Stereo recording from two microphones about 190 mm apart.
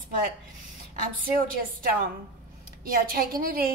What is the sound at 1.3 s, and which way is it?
A woman's voice, 50° right (ahead or behind).